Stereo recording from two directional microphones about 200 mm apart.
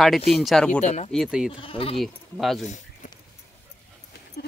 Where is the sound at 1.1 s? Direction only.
5° right (ahead or behind).